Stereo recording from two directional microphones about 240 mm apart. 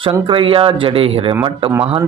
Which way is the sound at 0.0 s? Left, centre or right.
Right.